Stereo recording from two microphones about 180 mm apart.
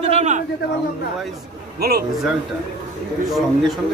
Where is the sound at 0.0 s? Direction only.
40° right (ahead or behind).